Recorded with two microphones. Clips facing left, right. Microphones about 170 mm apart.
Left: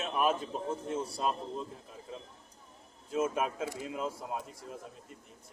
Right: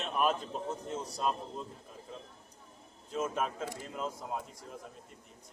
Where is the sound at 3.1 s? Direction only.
5° left (ahead or behind).